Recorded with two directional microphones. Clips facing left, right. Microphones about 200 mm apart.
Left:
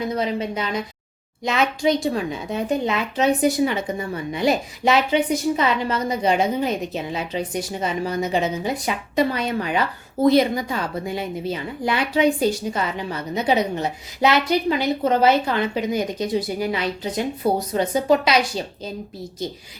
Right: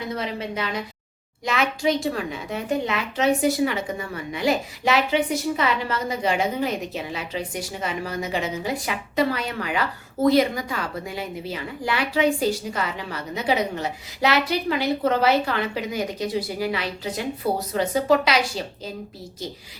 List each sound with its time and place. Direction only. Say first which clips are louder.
0.2 s a woman's voice: left 4 dB; 20° left (ahead or behind)